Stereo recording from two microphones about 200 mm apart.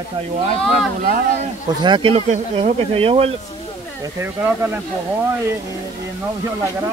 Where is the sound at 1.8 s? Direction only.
25° right (ahead or behind).